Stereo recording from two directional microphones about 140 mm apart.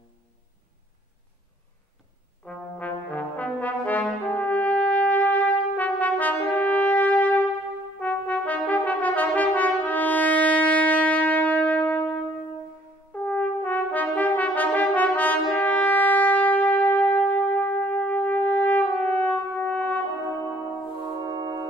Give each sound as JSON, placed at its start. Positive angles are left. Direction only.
{"t": 2.4, "sound": "brass instrument", "side_deg": 10}
{"t": 13.2, "sound": "brass instrument", "side_deg": 10}
{"t": 21.2, "sound": "brass instrument", "side_deg": -30}